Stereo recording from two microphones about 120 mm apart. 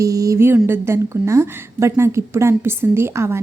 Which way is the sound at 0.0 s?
30° right (ahead or behind).